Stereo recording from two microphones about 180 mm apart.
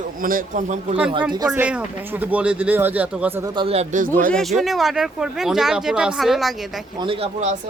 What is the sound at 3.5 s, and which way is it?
Speech, 35° right (ahead or behind).